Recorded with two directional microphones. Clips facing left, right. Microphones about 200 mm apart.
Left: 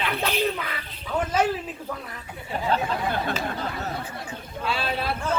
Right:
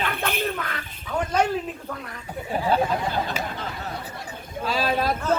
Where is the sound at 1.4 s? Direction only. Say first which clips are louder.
Even; 5° left (ahead or behind).